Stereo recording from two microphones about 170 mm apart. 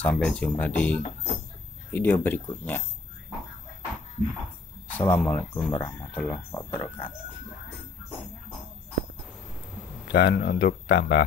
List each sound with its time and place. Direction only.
0.0 s speech: 5° left (ahead or behind)
4.9 s speech: 10° left (ahead or behind)
10.1 s speech: 65° left (ahead or behind)